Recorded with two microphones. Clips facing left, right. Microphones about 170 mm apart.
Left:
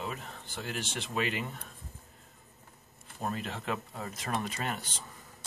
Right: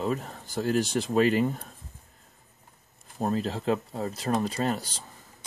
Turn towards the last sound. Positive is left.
turn(degrees=-35)  # may be behind; listen again after turning